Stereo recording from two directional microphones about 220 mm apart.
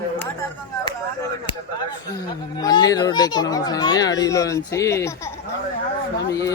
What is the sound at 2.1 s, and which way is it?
A child's voice, 15° left (ahead or behind).